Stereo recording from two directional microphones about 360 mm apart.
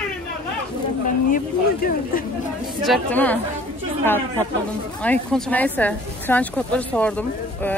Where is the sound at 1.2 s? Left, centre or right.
Left.